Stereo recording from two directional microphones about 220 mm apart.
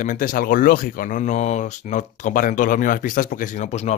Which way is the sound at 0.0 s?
35° left (ahead or behind).